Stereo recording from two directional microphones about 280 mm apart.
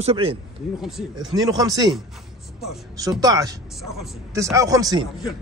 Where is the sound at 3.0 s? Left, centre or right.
Centre.